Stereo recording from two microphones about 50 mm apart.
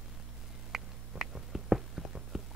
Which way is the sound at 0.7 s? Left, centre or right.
Centre.